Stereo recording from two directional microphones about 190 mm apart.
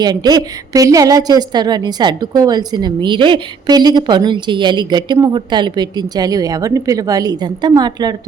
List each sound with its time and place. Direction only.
0.0 s a woman's voice: 20° right (ahead or behind)